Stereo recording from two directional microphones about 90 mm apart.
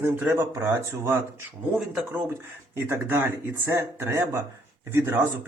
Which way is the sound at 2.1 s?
30° right (ahead or behind).